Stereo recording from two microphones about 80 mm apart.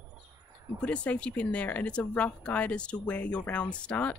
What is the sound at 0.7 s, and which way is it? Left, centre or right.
A woman's voice, centre.